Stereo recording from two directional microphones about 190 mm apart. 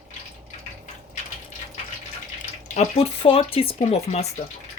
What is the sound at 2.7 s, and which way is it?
Speech, 35° left (ahead or behind).